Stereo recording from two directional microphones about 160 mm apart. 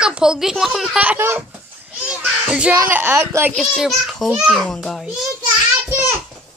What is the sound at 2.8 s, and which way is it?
Speech, 10° right (ahead or behind).